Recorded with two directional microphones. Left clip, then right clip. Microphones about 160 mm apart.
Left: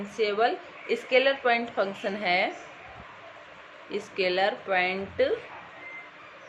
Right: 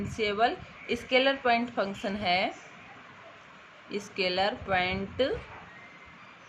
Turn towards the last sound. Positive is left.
turn(degrees=-30)  # may be behind; listen again after turning